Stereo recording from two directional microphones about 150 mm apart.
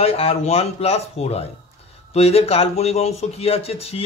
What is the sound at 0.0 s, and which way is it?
Speech, 40° left (ahead or behind).